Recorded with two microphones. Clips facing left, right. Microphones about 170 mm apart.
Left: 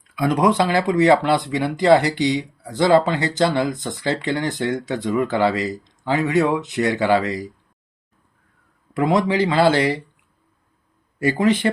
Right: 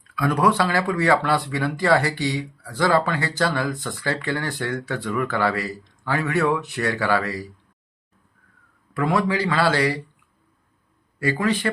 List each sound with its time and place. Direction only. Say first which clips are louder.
0.2 s speech: left 2 dB; 20° left (ahead or behind)
8.9 s speech: left 3 dB; 20° left (ahead or behind)
11.2 s speech: left 4 dB; 20° left (ahead or behind)